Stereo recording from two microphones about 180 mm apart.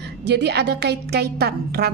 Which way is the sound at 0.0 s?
70° right (ahead or behind).